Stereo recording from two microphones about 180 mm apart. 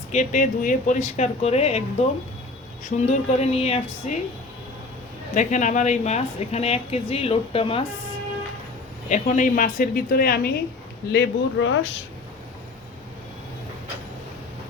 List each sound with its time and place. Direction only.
0.1 s a woman's voice: 40° left (ahead or behind)
2.8 s a woman's voice: 40° left (ahead or behind)
5.3 s a woman's voice: 45° left (ahead or behind)
9.0 s speech: 45° left (ahead or behind); by 10.5 s 60° left (ahead or behind)
11.1 s speech: 85° left